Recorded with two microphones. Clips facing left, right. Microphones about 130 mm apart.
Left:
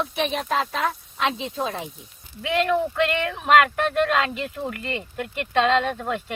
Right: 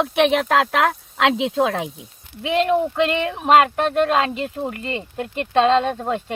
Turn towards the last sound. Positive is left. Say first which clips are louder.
# right 4 dB
turn(degrees=-30)  # may be behind; listen again after turning